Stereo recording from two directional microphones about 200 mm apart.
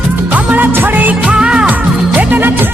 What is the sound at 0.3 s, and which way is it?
Music, 10° right (ahead or behind).